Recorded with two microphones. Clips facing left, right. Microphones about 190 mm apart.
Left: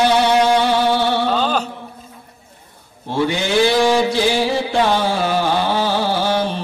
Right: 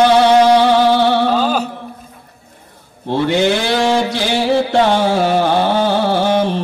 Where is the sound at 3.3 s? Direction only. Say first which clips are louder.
Right 1 dB; 65° right (ahead or behind).